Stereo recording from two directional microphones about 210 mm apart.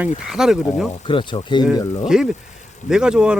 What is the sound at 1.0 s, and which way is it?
Speech, 25° left (ahead or behind).